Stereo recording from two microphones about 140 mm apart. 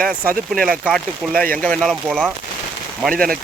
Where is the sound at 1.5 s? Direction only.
5° left (ahead or behind).